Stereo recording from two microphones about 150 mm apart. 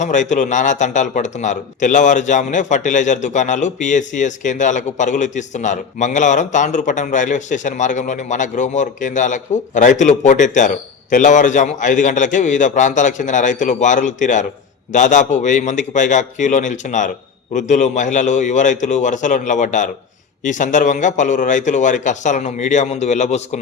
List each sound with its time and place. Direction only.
0.0 s a man's voice: 55° left (ahead or behind)